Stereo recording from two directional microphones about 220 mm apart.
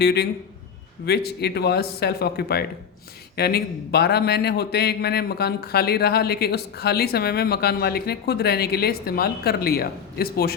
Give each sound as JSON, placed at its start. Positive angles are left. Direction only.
{"t": 0.0, "sound": "a man's voice", "side_deg": 50}